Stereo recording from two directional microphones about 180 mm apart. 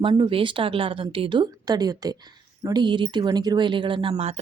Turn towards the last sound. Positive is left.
turn(degrees=-30)  # may be behind; listen again after turning